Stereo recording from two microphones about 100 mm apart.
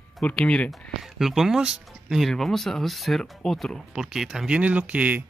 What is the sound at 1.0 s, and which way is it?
Speech, 5° right (ahead or behind).